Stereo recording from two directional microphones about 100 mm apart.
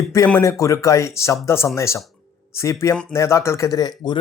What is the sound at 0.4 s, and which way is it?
Speech, 30° left (ahead or behind).